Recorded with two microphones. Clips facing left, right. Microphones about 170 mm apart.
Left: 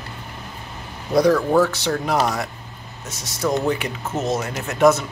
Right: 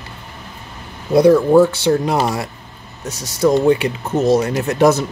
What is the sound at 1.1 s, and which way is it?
Speech, 25° right (ahead or behind).